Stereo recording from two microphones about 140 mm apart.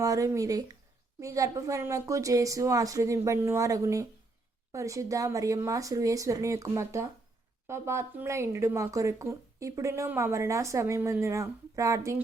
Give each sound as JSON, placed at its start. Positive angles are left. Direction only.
{"t": 0.0, "sound": "speech", "side_deg": -25}